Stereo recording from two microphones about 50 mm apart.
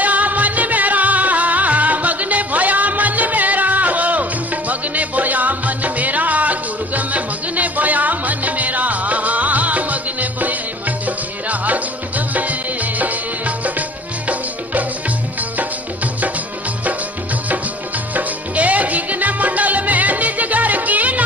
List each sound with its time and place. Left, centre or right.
0.0 s music: right
18.1 s music: right